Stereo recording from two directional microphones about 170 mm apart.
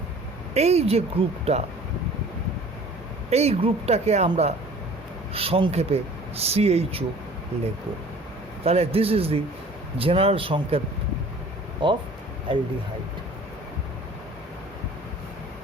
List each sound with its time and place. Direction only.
0.5 s speech: 40° right (ahead or behind)
3.2 s speech: 40° right (ahead or behind)
8.6 s speech: 35° right (ahead or behind)
11.8 s speech: 30° right (ahead or behind)